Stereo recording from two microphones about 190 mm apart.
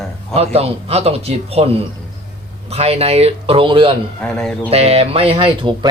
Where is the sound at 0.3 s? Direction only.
30° right (ahead or behind).